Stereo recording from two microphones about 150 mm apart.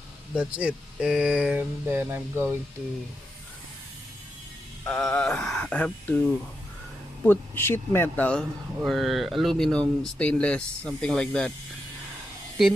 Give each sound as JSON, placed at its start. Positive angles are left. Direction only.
{"t": 0.3, "sound": "speech", "side_deg": -10}
{"t": 4.8, "sound": "speech", "side_deg": 5}
{"t": 7.2, "sound": "speech", "side_deg": 15}